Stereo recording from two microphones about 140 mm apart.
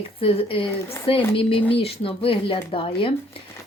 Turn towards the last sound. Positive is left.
turn(degrees=40)  # may be behind; listen again after turning